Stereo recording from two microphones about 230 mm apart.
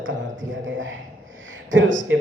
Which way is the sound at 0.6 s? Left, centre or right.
Right.